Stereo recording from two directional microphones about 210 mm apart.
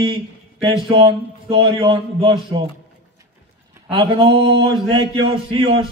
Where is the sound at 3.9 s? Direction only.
25° right (ahead or behind).